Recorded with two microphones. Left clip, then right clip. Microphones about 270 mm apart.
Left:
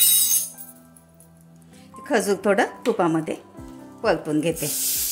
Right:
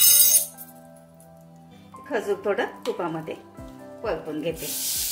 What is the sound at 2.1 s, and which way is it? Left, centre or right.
A woman's voice, left.